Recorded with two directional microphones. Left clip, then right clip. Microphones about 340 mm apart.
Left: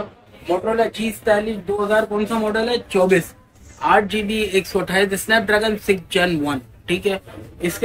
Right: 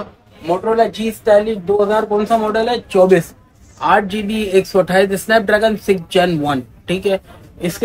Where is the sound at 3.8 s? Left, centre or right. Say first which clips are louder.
Right 2 dB; right.